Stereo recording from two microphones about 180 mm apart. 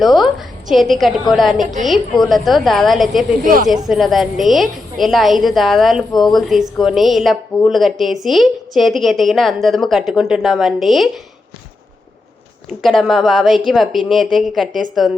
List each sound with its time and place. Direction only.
0.0 s a woman's voice: centre (ahead or behind)
3.4 s speech: 50° right (ahead or behind)
3.7 s a woman's voice: centre (ahead or behind)
12.8 s a woman's voice: centre (ahead or behind)
14.7 s speech: 45° right (ahead or behind)